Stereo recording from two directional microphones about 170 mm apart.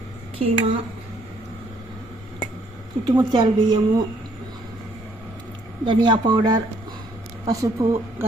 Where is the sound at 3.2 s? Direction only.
25° right (ahead or behind).